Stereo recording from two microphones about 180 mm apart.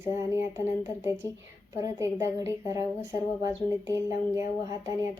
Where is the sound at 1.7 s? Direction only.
15° right (ahead or behind).